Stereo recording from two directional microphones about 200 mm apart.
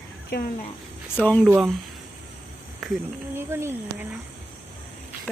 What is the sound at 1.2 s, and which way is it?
Speech, 5° left (ahead or behind).